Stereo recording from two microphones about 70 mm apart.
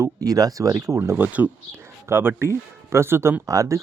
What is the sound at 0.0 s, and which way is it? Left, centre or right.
Speech, right.